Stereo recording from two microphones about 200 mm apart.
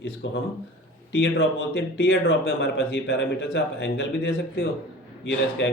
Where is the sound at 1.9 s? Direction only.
60° left (ahead or behind).